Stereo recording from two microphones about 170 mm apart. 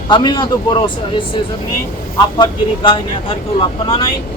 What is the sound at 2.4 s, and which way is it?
Speech, 30° left (ahead or behind).